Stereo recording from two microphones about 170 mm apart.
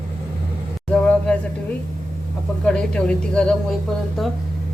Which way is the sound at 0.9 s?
5° left (ahead or behind).